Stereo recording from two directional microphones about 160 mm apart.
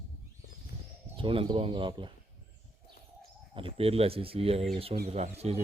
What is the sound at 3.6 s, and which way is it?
Speech, 35° right (ahead or behind).